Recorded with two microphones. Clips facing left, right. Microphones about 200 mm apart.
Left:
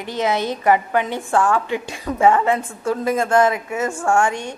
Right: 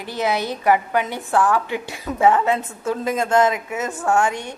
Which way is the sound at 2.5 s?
20° right (ahead or behind).